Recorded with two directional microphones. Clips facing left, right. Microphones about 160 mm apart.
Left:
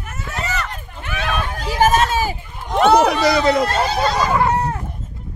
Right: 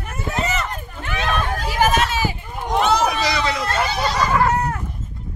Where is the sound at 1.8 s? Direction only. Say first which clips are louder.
Left 3 dB; 45° left (ahead or behind).